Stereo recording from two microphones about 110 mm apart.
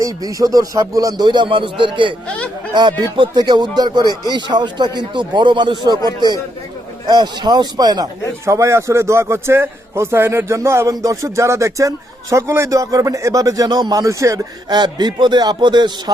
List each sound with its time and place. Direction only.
0.0 s speech: 30° right (ahead or behind); by 2.1 s 50° right (ahead or behind)
2.2 s speech: 10° left (ahead or behind)
3.0 s speech: 40° right (ahead or behind)
8.4 s a man's voice: 25° right (ahead or behind)